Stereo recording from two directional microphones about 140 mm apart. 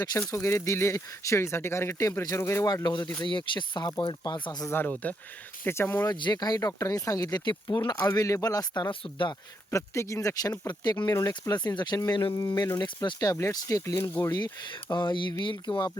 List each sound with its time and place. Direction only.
0.3 s speech: 20° left (ahead or behind)
4.7 s speech: 10° left (ahead or behind)
6.1 s speech: 30° left (ahead or behind)
8.9 s speech: 35° left (ahead or behind)
9.7 s speech: 20° left (ahead or behind)
14.3 s speech: 30° left (ahead or behind)